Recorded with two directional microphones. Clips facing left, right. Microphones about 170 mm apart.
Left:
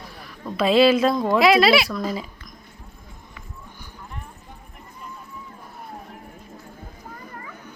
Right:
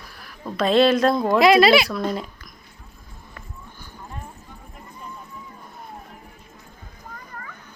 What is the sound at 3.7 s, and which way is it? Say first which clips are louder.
Clip-clop: even; 15° left (ahead or behind).